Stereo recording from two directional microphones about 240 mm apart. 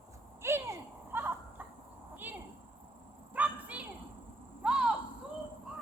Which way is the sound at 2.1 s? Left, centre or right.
Centre.